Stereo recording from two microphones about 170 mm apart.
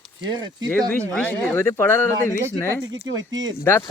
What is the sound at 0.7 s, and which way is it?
Speech, 10° left (ahead or behind).